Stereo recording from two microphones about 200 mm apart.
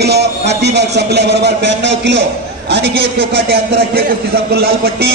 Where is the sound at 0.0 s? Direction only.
55° right (ahead or behind).